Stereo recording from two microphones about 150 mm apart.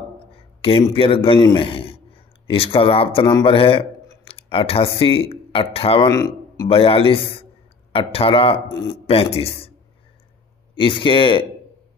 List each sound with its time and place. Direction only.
0.3 s a sound: 40° left (ahead or behind)
0.8 s a man's voice: 35° left (ahead or behind)
6.0 s speech: 25° left (ahead or behind)
6.7 s a man's voice: 35° left (ahead or behind)
10.7 s a man's voice: 35° left (ahead or behind)